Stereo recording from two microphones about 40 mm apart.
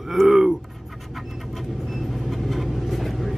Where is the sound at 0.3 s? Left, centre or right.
Centre.